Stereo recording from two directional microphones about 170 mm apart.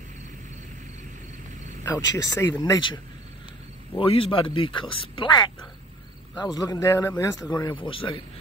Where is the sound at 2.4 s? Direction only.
25° left (ahead or behind).